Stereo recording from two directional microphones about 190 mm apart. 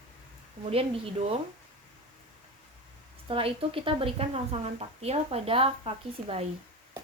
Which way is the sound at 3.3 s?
30° right (ahead or behind).